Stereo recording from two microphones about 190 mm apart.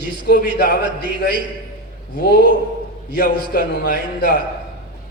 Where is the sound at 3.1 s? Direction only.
55° left (ahead or behind).